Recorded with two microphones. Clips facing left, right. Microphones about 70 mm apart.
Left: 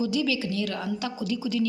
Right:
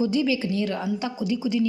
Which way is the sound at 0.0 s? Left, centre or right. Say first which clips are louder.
Right 3 dB; right.